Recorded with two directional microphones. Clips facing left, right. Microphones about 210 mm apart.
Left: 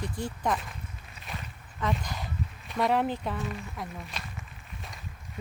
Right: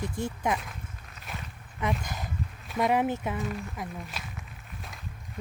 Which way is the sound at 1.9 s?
5° right (ahead or behind).